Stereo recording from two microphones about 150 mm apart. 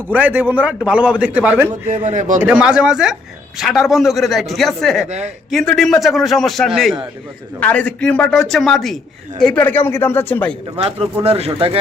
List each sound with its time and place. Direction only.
0.1 s a man's voice: 10° right (ahead or behind)
2.0 s speech: 55° right (ahead or behind)
2.4 s a man's voice: 5° right (ahead or behind)
5.0 s speech: 50° right (ahead or behind)
5.5 s a man's voice: centre (ahead or behind)
10.8 s speech: 40° right (ahead or behind)